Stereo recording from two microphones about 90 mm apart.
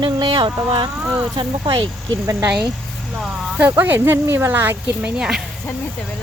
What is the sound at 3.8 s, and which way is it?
Speech, 25° right (ahead or behind).